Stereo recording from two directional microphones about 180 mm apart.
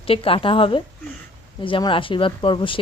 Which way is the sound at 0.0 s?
30° left (ahead or behind).